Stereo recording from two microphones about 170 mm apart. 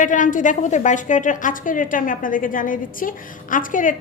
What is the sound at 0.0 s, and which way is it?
A woman's voice, 50° left (ahead or behind).